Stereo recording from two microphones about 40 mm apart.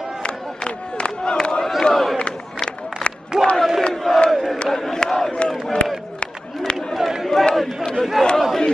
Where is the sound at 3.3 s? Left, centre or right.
Centre.